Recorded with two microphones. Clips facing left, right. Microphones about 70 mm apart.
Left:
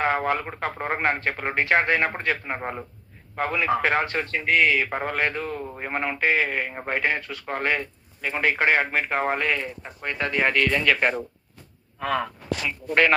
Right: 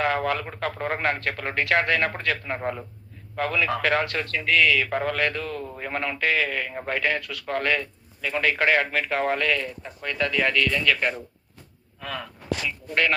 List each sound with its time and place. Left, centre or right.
0.0 s a man's voice: left